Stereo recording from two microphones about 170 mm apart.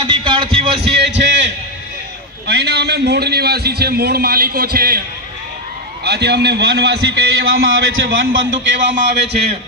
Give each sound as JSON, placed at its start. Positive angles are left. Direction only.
{"t": 0.0, "sound": "music", "side_deg": -30}
{"t": 0.9, "sound": "a man's voice", "side_deg": -90}
{"t": 2.5, "sound": "a man's voice", "side_deg": -75}
{"t": 6.1, "sound": "a man's voice", "side_deg": -80}